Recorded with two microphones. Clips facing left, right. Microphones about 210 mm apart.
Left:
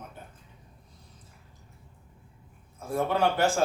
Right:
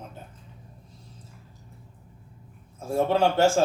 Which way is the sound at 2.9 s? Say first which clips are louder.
Right 4 dB; 25° right (ahead or behind).